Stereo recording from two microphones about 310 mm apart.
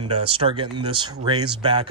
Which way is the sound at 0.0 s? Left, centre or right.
Centre.